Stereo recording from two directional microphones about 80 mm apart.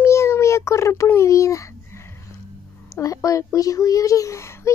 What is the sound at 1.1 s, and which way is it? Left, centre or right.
A child's voice, left.